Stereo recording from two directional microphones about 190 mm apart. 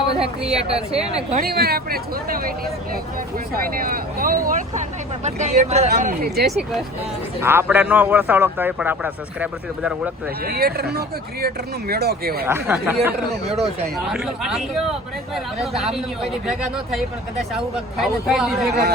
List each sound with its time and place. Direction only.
0.5 s speech: 35° right (ahead or behind)
1.4 s speech: 55° right (ahead or behind); by 5.9 s 35° right (ahead or behind)
5.9 s speech: 55° right (ahead or behind)
7.4 s a man's voice: 10° right (ahead or behind)
10.4 s speech: 55° right (ahead or behind)
12.5 s a man's voice: 10° right (ahead or behind)
15.6 s speech: centre (ahead or behind)